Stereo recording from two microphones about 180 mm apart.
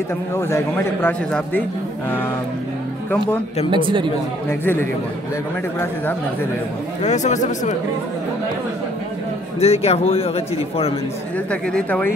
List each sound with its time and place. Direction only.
0.3 s a man's voice: 15° left (ahead or behind)
3.7 s speech: 25° right (ahead or behind)
4.5 s a man's voice: 15° left (ahead or behind)
7.0 s speech: 40° left (ahead or behind)
9.6 s speech: 35° left (ahead or behind)
11.3 s a man's voice: 5° left (ahead or behind)